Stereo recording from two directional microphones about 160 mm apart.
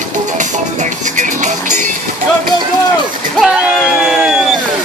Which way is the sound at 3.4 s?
5° right (ahead or behind).